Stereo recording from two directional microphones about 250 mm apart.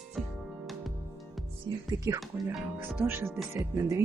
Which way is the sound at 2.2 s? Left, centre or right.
Centre.